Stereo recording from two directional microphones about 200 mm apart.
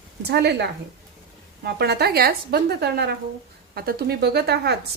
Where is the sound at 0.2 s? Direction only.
55° right (ahead or behind).